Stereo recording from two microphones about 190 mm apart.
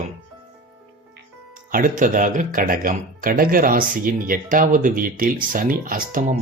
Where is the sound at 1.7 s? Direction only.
45° right (ahead or behind).